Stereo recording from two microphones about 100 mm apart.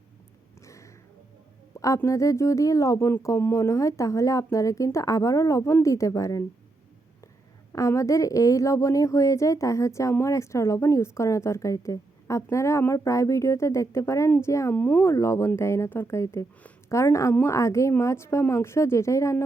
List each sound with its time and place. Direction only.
0.6 s a sound: 30° left (ahead or behind)
2.0 s a woman's voice: 30° left (ahead or behind)
7.7 s a woman's voice: 30° left (ahead or behind)